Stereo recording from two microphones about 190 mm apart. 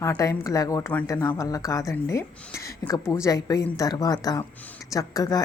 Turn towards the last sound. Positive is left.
turn(degrees=20)  # may be behind; listen again after turning